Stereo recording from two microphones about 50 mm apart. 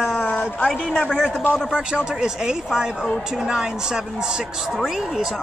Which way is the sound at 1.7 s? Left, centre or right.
Centre.